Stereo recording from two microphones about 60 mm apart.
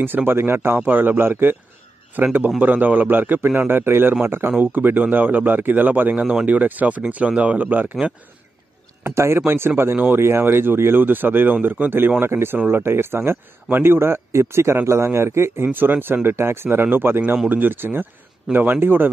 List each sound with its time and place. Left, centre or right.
0.0 s speech: right
2.6 s speech: right
9.1 s speech: right
12.5 s speech: right
12.8 s speech: right